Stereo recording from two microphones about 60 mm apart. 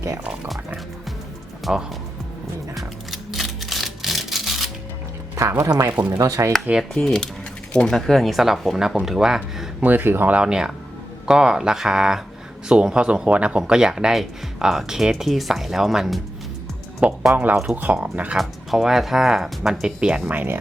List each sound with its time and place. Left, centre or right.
1.7 s speech: centre
2.7 s music: centre
5.3 s speech: right
6.1 s speech: right
6.9 s speech: centre
7.9 s speech: centre
9.8 s speech: right
10.3 s speech: centre
17.0 s speech: right
18.3 s speech: centre
20.3 s speech: right